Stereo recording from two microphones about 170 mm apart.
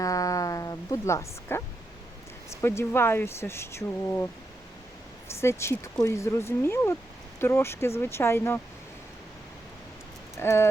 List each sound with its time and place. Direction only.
0.0 s a sound: 20° left (ahead or behind)
2.5 s speech: 15° left (ahead or behind)
5.4 s speech: 15° left (ahead or behind)
10.3 s speech: 15° left (ahead or behind)